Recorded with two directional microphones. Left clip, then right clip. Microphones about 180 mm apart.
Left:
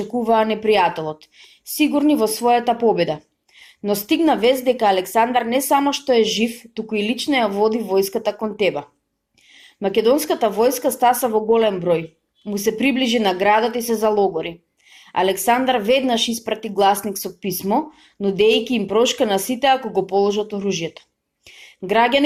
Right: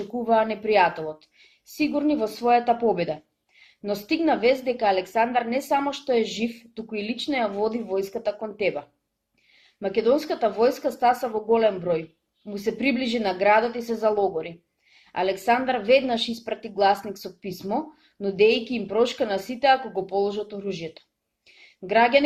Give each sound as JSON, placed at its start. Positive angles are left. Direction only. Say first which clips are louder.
{"t": 0.1, "sound": "speech", "louder": "left 4 dB", "side_deg": 35}
{"t": 9.8, "sound": "speech", "louder": "left 5 dB", "side_deg": 30}
{"t": 21.6, "sound": "a sound", "louder": "left 3 dB", "side_deg": 35}